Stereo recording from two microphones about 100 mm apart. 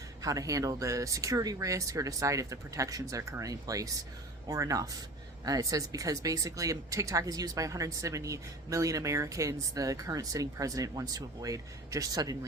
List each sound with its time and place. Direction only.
0.2 s speech: 35° right (ahead or behind)